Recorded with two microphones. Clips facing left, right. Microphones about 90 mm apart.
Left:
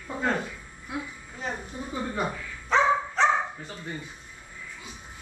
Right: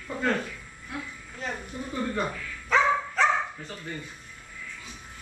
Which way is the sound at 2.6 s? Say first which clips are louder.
Left 1 dB; 30° left (ahead or behind).